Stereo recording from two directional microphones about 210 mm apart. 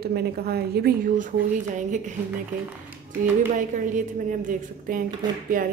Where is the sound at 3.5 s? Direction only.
35° right (ahead or behind).